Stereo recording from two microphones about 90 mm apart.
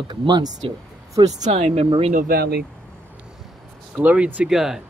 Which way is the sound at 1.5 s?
90° right.